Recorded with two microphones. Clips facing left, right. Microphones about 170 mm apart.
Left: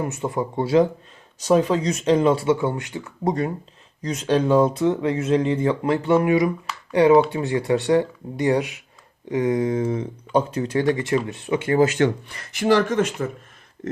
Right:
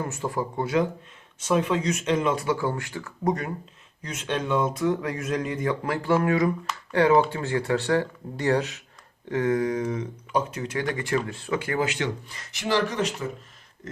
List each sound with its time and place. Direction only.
0.0 s speech: 20° left (ahead or behind)
11.8 s speech: 45° left (ahead or behind)